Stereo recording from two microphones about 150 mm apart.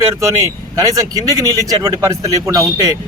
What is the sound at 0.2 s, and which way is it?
A man's voice, 20° right (ahead or behind).